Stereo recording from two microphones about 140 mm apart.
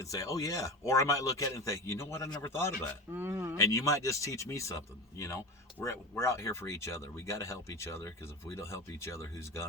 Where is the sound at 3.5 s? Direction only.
25° left (ahead or behind).